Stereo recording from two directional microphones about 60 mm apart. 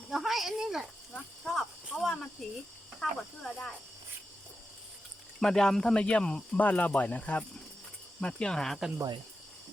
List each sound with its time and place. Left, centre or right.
0.1 s cricket: centre
2.4 s speech: centre
3.0 s cricket: centre
5.4 s cricket: centre
6.6 s speech: left
8.2 s cricket: centre